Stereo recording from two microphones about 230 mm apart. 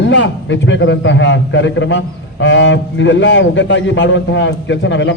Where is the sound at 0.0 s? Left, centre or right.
Left.